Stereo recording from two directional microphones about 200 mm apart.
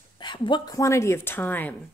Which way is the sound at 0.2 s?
20° left (ahead or behind).